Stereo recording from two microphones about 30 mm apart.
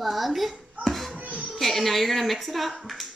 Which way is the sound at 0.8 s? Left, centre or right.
Right.